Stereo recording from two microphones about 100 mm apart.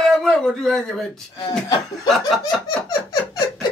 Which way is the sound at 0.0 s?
5° left (ahead or behind).